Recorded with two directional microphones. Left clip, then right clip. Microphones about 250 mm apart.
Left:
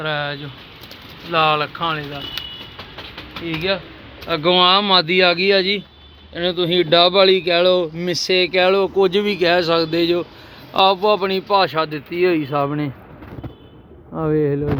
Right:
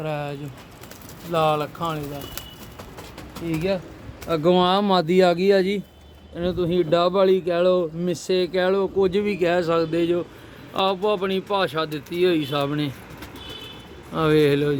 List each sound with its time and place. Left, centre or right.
0.0 s speech: centre
4.3 s speech: centre
14.1 s speech: centre